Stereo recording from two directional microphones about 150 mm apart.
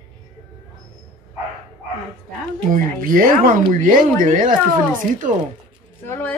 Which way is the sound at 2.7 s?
70° right (ahead or behind).